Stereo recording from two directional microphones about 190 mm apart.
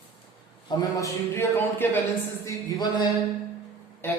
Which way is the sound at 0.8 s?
15° left (ahead or behind).